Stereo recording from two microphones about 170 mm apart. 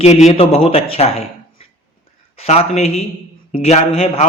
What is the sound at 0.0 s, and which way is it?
A man's voice, 40° left (ahead or behind).